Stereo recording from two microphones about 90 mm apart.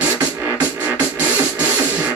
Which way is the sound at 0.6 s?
25° left (ahead or behind).